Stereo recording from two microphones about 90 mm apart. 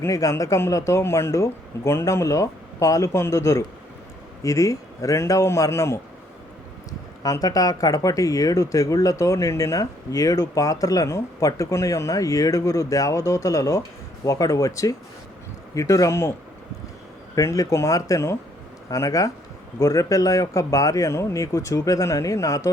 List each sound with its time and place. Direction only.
0.0 s speech: 35° left (ahead or behind)
7.2 s speech: 40° left (ahead or behind)
17.3 s speech: 40° left (ahead or behind)